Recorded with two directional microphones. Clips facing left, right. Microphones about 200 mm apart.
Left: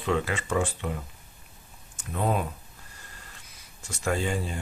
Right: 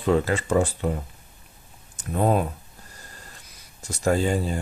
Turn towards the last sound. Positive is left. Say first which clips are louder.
# right 6 dB
turn(degrees=-40)  # may be behind; listen again after turning